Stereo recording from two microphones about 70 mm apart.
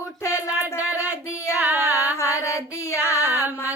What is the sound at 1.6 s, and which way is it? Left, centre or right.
Music, right.